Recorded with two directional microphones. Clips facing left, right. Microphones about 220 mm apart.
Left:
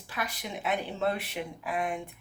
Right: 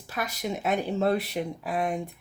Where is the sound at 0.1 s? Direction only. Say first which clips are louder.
Right 5 dB; 40° right (ahead or behind).